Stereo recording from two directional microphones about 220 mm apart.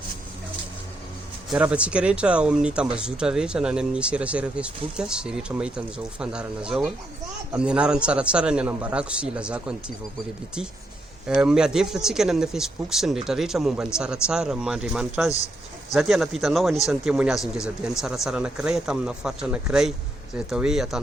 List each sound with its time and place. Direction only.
1.5 s speech: 5° right (ahead or behind)
11.3 s speech: 5° right (ahead or behind)